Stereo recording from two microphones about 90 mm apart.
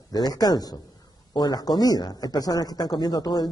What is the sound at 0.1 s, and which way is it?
A man's voice, 45° left (ahead or behind).